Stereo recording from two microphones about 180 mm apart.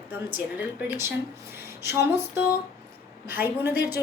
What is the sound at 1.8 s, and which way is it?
Speech, 15° right (ahead or behind).